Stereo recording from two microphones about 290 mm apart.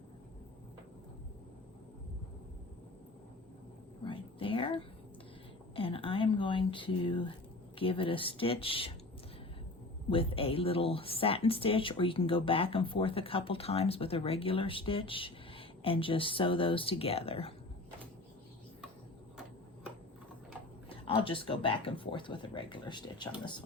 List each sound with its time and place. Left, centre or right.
4.0 s a sound: centre
7.8 s speech: centre
10.1 s speech: centre
20.9 s speech: centre